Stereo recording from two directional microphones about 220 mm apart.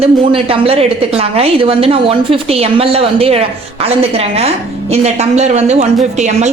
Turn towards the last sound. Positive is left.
turn(degrees=-30)  # may be behind; listen again after turning